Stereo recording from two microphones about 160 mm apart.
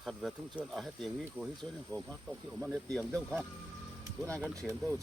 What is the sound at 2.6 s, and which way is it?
Speech, centre (ahead or behind).